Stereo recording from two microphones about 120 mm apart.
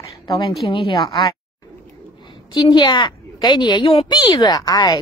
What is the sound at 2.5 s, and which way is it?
A woman's voice, 40° left (ahead or behind).